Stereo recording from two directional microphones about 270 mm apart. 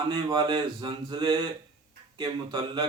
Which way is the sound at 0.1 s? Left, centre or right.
Centre.